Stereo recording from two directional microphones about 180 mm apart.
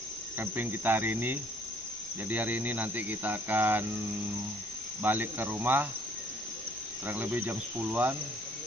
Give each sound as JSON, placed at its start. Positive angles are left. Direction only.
{"t": 0.4, "sound": "speech", "side_deg": -10}
{"t": 5.0, "sound": "speech", "side_deg": -10}
{"t": 7.1, "sound": "speech", "side_deg": -10}